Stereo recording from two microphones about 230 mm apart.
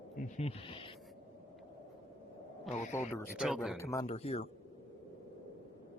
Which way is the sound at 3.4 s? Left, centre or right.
Centre.